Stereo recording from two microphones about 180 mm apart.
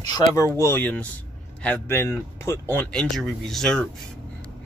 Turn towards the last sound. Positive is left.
turn(degrees=5)  # may be behind; listen again after turning